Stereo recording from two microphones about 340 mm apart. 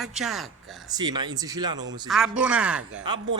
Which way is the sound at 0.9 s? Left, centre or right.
Centre.